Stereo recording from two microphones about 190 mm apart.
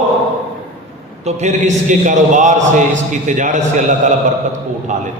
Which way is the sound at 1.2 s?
40° right (ahead or behind).